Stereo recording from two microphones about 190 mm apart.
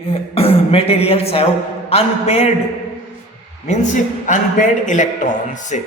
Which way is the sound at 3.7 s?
40° left (ahead or behind).